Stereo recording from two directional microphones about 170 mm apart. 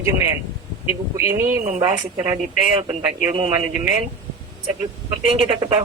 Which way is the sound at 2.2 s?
25° right (ahead or behind).